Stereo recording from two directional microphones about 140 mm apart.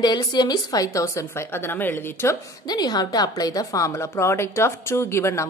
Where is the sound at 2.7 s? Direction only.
30° left (ahead or behind).